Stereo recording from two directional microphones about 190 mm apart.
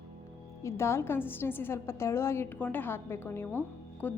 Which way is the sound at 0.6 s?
15° left (ahead or behind).